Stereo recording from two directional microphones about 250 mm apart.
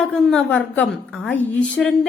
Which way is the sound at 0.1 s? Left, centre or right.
Centre.